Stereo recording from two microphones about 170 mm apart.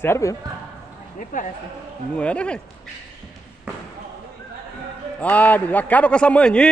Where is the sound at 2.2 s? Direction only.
5° left (ahead or behind).